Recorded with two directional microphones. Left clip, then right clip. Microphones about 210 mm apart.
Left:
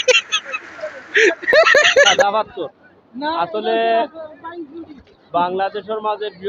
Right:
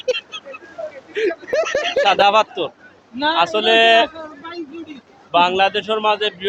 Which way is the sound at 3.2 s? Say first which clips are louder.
Right 4 dB; 25° right (ahead or behind).